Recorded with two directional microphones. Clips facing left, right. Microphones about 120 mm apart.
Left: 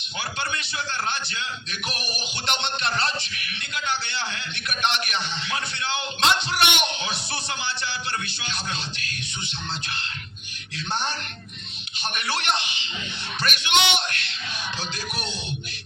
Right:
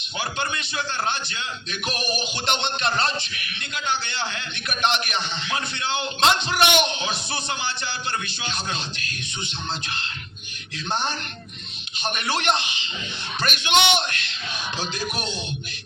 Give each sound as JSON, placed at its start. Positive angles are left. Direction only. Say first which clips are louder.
{"t": 2.5, "sound": "a man's voice", "louder": "right 2 dB", "side_deg": -20}
{"t": 4.7, "sound": "a man's voice", "louder": "right 2 dB", "side_deg": -20}
{"t": 8.4, "sound": "a man's voice", "louder": "right 2 dB", "side_deg": -25}
{"t": 12.0, "sound": "a man's voice", "louder": "right 3 dB", "side_deg": -20}